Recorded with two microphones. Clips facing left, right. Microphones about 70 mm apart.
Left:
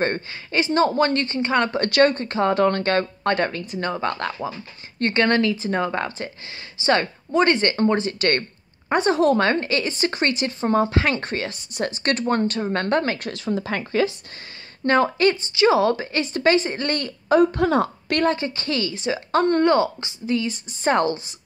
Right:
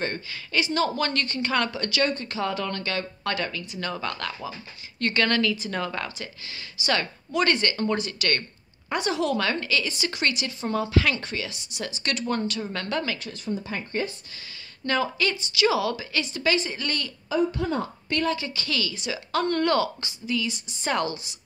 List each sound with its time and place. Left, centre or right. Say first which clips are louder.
0.3 s speech: left 4 dB; left
1.7 s speech: left 8 dB; left
13.3 s speech: left 6 dB; left
14.9 s speech: left 7 dB; left
17.3 s a woman's voice: left 8 dB; left
18.2 s speech: left 7 dB; left
20.3 s speech: left 3 dB; left